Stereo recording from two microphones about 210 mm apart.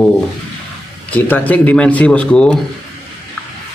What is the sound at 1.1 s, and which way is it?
Speech, 10° left (ahead or behind).